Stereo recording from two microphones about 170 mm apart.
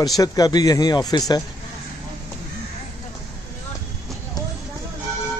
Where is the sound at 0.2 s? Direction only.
20° left (ahead or behind).